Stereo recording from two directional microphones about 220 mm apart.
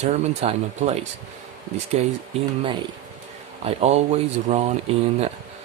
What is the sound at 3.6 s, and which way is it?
Speech, 30° right (ahead or behind).